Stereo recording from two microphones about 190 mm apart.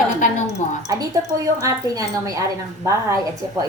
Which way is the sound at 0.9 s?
20° right (ahead or behind).